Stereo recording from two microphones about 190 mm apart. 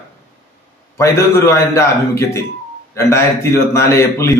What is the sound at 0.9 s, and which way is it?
A man's voice, 15° left (ahead or behind).